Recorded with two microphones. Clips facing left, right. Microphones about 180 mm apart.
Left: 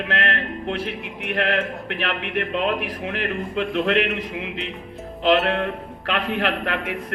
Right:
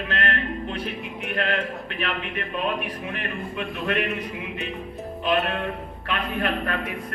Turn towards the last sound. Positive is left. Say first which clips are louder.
# left 2 dB
turn(degrees=80)